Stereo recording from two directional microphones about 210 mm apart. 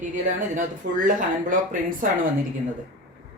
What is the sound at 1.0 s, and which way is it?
Speech, 40° right (ahead or behind).